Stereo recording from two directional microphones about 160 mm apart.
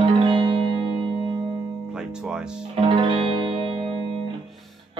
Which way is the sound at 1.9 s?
5° right (ahead or behind).